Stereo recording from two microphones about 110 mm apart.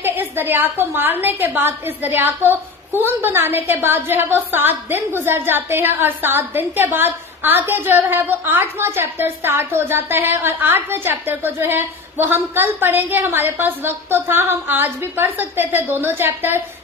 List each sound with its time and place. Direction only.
0.0 s a woman's voice: 20° right (ahead or behind)